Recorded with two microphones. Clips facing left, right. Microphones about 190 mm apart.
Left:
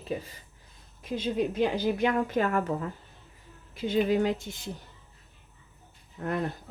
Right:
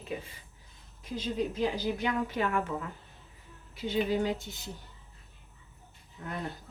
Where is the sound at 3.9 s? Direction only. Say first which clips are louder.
Left 4 dB; 50° left (ahead or behind).